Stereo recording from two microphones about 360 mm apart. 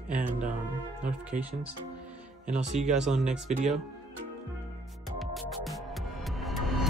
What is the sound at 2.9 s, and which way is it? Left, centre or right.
Speech, centre.